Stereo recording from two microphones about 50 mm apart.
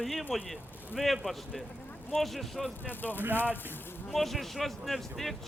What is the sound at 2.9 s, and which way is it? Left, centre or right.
Speech, left.